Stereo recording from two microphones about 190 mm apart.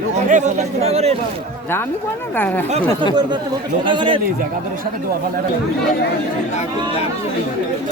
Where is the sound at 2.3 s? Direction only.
10° left (ahead or behind).